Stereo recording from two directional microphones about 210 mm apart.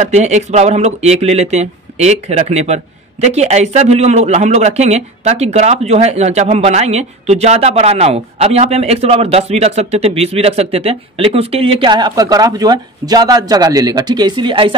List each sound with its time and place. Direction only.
0.0 s speech: 35° right (ahead or behind)